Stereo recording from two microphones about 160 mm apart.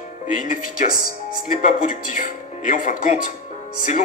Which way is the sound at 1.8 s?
55° left (ahead or behind).